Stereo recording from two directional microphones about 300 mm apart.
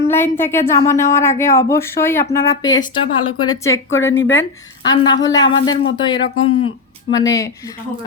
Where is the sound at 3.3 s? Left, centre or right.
Left.